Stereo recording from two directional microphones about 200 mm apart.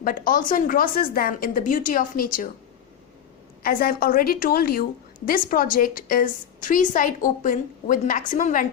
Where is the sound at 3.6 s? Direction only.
45° left (ahead or behind).